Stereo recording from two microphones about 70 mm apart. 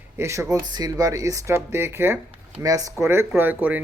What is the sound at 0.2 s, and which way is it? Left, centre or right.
Speech, right.